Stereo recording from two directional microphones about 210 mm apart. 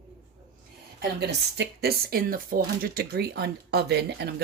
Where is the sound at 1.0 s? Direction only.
50° right (ahead or behind).